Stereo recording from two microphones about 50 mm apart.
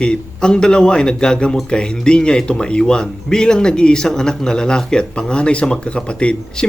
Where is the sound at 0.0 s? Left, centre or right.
Centre.